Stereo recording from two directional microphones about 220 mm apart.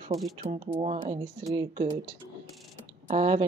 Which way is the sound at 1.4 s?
20° right (ahead or behind).